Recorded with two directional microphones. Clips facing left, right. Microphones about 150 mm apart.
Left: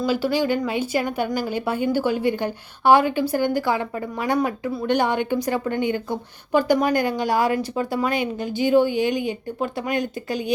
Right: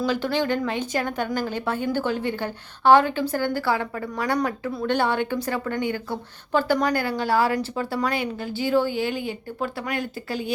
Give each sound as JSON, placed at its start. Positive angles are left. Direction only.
{"t": 0.0, "sound": "a woman's voice", "side_deg": 10}